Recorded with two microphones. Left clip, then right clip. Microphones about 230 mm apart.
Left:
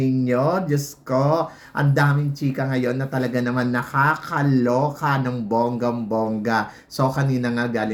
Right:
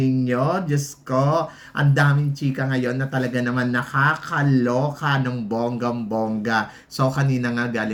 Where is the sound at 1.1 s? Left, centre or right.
Centre.